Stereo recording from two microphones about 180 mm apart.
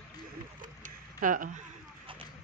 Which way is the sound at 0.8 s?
45° right (ahead or behind).